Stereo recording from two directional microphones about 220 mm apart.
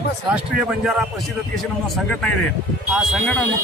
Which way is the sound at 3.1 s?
5° left (ahead or behind).